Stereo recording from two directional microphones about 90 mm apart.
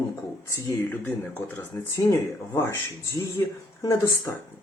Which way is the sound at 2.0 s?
30° left (ahead or behind).